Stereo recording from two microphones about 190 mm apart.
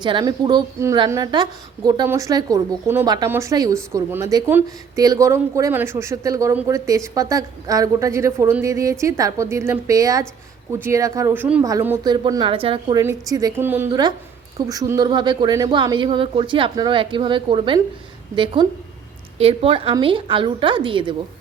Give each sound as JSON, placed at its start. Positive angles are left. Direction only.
{"t": 0.0, "sound": "a woman's voice", "side_deg": -25}
{"t": 13.0, "sound": "a woman's voice", "side_deg": -15}